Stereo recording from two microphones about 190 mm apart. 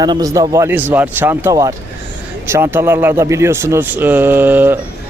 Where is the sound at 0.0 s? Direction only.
20° right (ahead or behind).